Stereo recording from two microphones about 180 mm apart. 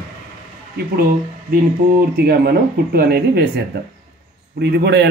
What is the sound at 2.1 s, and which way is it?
Speech, 60° right (ahead or behind).